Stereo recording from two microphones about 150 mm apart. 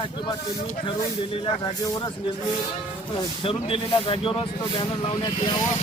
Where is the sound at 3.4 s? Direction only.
40° left (ahead or behind).